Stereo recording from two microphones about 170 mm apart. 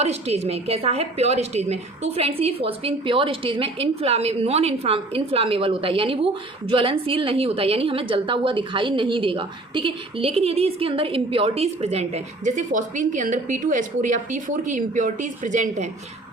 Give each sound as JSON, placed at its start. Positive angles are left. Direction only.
{"t": 0.0, "sound": "a woman's voice", "side_deg": -40}